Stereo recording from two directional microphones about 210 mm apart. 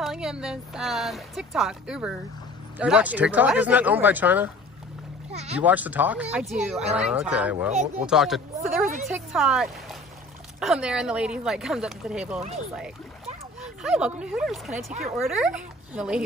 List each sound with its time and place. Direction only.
0.0 s speech: centre (ahead or behind)
5.3 s speech: 30° right (ahead or behind)
5.6 s speech: 5° right (ahead or behind)
7.7 s speech: 35° right (ahead or behind)
8.1 s speech: centre (ahead or behind)
13.8 s speech: 5° right (ahead or behind)
14.9 s speech: 30° right (ahead or behind)
15.1 s speech: centre (ahead or behind)